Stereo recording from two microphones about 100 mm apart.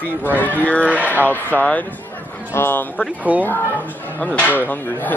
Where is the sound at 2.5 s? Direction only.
25° left (ahead or behind).